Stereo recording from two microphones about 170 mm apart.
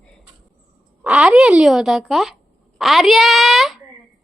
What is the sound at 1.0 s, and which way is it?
A child's voice, 5° right (ahead or behind).